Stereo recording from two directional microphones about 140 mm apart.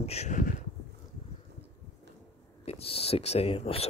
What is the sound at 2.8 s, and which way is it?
Speech, 45° left (ahead or behind).